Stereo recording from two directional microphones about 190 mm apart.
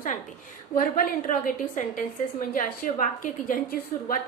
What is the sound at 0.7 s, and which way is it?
A woman's voice, 45° left (ahead or behind).